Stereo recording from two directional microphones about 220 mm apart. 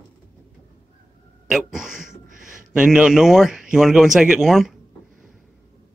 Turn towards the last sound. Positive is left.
turn(degrees=0)  # may be behind; listen again after turning